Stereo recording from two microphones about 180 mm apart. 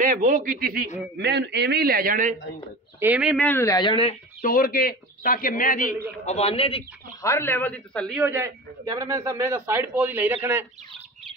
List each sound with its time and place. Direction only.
0.0 s speech: 50° right (ahead or behind)
1.1 s a man's voice: 70° right (ahead or behind); by 2.3 s 50° right (ahead or behind)
3.0 s speech: 5° right (ahead or behind)
3.4 s speech: 15° left (ahead or behind)
4.4 s speech: 50° left (ahead or behind)
6.2 s a man's voice: 35° left (ahead or behind)
7.2 s speech: 15° left (ahead or behind)
8.2 s a man's voice: 10° right (ahead or behind)